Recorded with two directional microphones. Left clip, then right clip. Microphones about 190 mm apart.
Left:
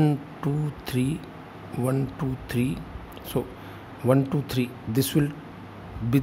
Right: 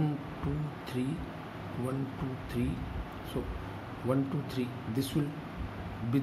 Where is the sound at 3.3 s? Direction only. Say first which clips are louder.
Left 10 dB; 60° left (ahead or behind).